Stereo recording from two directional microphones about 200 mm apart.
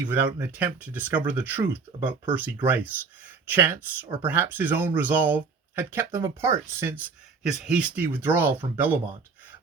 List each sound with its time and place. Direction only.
0.1 s speech: 10° right (ahead or behind)